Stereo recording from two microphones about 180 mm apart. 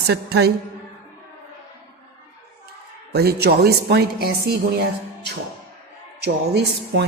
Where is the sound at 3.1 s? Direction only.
60° right (ahead or behind).